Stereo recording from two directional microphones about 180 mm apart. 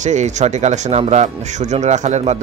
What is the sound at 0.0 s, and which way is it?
Speech, 40° right (ahead or behind).